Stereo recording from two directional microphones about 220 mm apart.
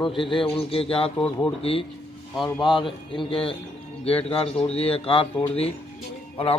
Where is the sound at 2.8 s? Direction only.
25° left (ahead or behind).